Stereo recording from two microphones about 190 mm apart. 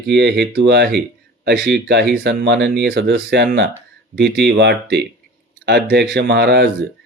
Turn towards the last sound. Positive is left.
turn(degrees=-60)  # may be behind; listen again after turning